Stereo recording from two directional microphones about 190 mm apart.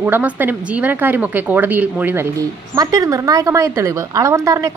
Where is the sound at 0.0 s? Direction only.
10° right (ahead or behind).